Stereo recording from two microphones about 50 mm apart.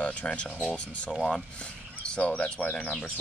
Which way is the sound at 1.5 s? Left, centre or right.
Left.